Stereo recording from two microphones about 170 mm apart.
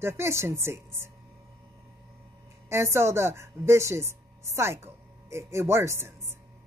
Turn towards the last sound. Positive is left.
turn(degrees=-15)  # may be behind; listen again after turning